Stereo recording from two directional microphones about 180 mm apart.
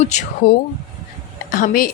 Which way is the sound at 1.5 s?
50° left (ahead or behind).